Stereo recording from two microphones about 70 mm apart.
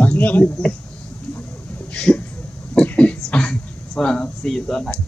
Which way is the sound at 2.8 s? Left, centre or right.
Centre.